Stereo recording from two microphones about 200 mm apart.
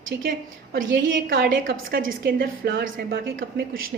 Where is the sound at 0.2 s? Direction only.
45° right (ahead or behind).